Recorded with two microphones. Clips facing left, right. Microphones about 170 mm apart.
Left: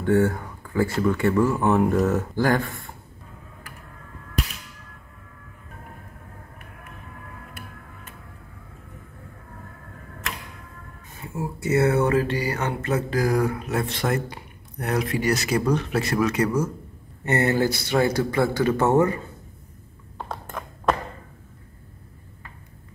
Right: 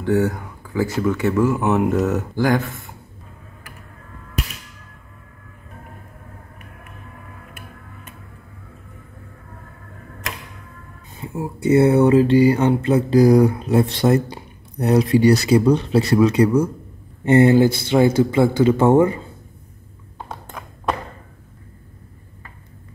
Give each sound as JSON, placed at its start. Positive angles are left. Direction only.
{"t": 0.0, "sound": "speech", "side_deg": 0}
{"t": 11.1, "sound": "a sound", "side_deg": -20}
{"t": 11.6, "sound": "mantra", "side_deg": -30}
{"t": 13.5, "sound": "speech", "side_deg": -30}
{"t": 17.2, "sound": "mantra", "side_deg": -25}
{"t": 20.2, "sound": "a sound", "side_deg": 0}